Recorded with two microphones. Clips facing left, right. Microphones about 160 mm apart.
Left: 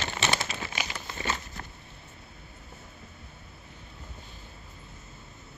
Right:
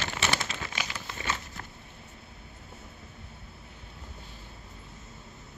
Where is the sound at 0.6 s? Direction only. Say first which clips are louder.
Left 1 dB; 15° left (ahead or behind).